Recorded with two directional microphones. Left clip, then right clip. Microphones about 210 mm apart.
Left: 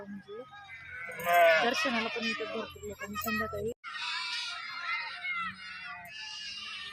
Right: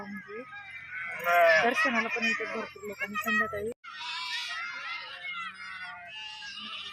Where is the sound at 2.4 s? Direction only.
10° right (ahead or behind).